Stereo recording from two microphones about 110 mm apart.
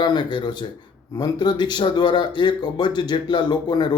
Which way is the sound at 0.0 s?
40° left (ahead or behind).